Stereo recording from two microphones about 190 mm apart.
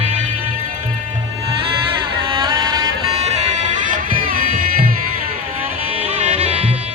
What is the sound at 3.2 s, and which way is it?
Music, 35° right (ahead or behind).